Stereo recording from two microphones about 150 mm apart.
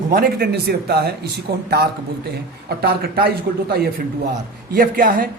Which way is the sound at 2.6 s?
90° right.